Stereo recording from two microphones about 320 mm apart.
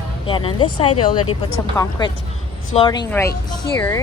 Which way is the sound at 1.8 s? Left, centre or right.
Centre.